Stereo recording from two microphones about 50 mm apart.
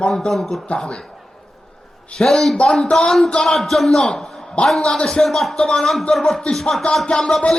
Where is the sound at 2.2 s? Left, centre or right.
Centre.